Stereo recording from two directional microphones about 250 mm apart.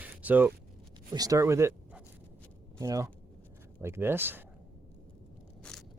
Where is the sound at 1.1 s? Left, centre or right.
Centre.